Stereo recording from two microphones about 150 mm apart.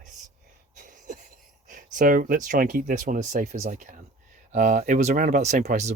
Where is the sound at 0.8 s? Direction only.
60° right (ahead or behind).